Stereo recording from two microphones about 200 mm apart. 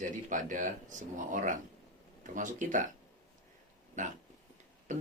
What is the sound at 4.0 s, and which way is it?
Speech, 40° right (ahead or behind).